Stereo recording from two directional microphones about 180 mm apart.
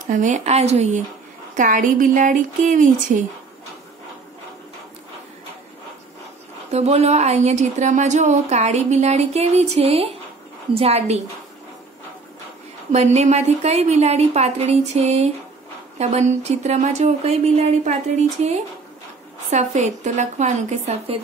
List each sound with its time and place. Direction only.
0.1 s a woman's voice: 45° right (ahead or behind)
1.6 s speech: 45° right (ahead or behind)
6.7 s a woman's voice: 35° right (ahead or behind)
12.9 s a woman's voice: 40° right (ahead or behind)